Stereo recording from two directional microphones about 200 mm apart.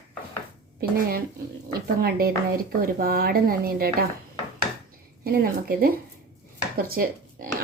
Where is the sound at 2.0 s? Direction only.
45° right (ahead or behind).